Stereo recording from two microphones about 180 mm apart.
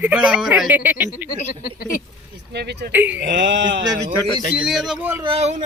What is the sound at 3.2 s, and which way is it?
Speech, 80° right.